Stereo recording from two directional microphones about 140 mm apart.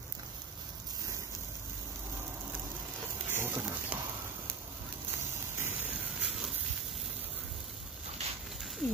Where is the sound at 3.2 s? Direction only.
15° right (ahead or behind).